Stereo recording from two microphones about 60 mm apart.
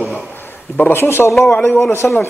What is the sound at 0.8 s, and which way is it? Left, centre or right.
Speech, left.